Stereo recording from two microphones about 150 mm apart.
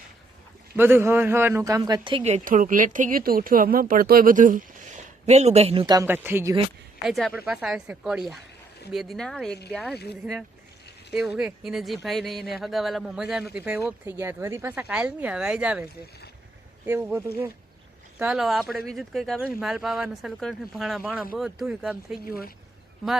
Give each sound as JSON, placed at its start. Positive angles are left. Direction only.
{"t": 0.8, "sound": "speech", "side_deg": -15}
{"t": 2.2, "sound": "speech", "side_deg": -55}
{"t": 5.8, "sound": "speech", "side_deg": -25}
{"t": 6.1, "sound": "speech", "side_deg": -15}
{"t": 7.0, "sound": "speech", "side_deg": 0}
{"t": 11.1, "sound": "speech", "side_deg": -5}
{"t": 13.6, "sound": "speech", "side_deg": -15}
{"t": 18.2, "sound": "speech", "side_deg": -5}
{"t": 22.3, "sound": "speech", "side_deg": 80}